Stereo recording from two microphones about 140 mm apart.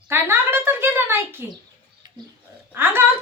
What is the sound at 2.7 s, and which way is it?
Speech, 15° right (ahead or behind).